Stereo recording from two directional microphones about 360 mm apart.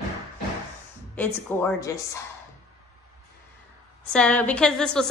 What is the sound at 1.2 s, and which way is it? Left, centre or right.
Speech, centre.